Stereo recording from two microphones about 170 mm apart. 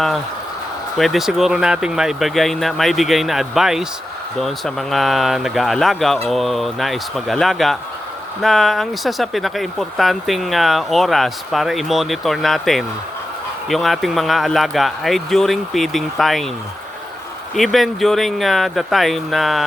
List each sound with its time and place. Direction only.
0.9 s speech: centre (ahead or behind)
17.5 s speech: centre (ahead or behind)